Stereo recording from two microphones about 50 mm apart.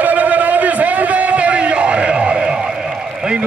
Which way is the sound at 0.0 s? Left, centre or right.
Right.